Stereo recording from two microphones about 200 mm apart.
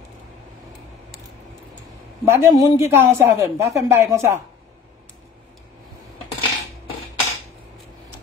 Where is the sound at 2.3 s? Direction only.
15° right (ahead or behind).